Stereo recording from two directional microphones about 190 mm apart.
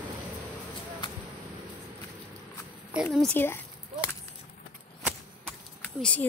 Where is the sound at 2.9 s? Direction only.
Centre (ahead or behind).